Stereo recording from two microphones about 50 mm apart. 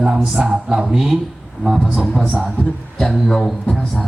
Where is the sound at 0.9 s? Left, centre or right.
Centre.